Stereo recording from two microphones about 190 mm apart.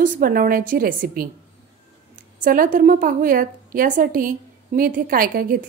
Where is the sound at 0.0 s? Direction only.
45° right (ahead or behind).